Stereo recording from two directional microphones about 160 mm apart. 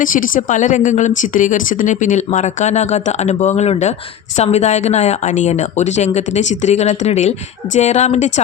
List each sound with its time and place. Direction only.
0.0 s speech: 55° left (ahead or behind)